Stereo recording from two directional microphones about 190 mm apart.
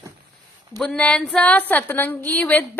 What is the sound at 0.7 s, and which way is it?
A woman's voice, 5° left (ahead or behind).